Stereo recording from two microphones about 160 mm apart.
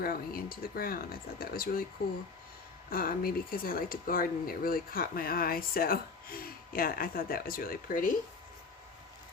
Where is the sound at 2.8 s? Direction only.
65° left (ahead or behind).